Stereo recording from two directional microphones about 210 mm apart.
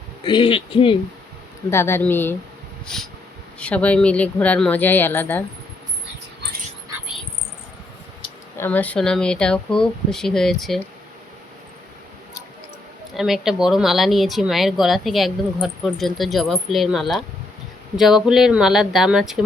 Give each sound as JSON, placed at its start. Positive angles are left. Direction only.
{"t": 0.3, "sound": "speech", "side_deg": 25}
{"t": 1.7, "sound": "speech", "side_deg": 10}
{"t": 8.5, "sound": "speech", "side_deg": 10}
{"t": 13.1, "sound": "speech", "side_deg": 0}